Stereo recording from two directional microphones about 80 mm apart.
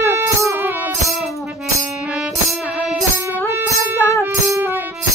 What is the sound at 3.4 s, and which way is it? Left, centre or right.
Music, right.